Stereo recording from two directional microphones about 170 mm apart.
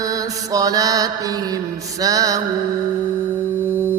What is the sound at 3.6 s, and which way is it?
Music, 15° right (ahead or behind).